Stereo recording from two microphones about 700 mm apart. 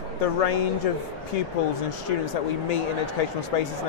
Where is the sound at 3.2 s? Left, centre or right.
Left.